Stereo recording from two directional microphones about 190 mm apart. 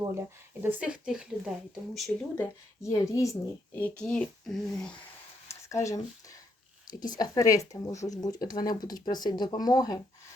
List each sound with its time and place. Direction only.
0.6 s speech: 5° right (ahead or behind)
2.3 s a woman's voice: 15° left (ahead or behind)
3.8 s speech: 5° left (ahead or behind)
5.5 s a sound: 15° left (ahead or behind)
7.2 s speech: 20° left (ahead or behind)